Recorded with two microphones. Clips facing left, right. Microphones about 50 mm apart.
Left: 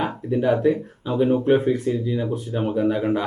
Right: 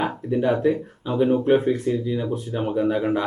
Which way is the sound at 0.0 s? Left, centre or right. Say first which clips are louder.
Even; centre.